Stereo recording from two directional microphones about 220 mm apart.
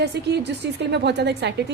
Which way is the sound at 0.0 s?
50° right (ahead or behind).